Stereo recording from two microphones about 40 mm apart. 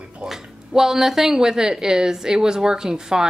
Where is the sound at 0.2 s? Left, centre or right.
Right.